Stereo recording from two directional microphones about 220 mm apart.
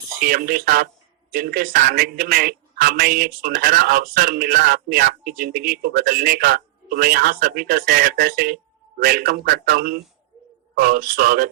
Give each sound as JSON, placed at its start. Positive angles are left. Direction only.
{"t": 0.2, "sound": "a man's voice", "side_deg": -40}